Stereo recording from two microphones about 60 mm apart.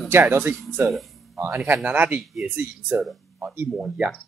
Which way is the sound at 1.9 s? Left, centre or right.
Right.